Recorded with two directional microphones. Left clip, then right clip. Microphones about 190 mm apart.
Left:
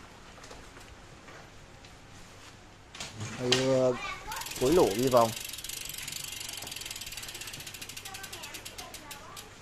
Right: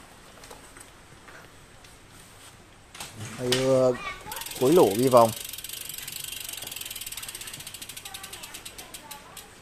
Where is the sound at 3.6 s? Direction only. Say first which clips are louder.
Right 6 dB; 25° right (ahead or behind).